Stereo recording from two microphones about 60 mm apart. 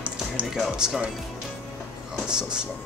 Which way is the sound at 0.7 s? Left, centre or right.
Centre.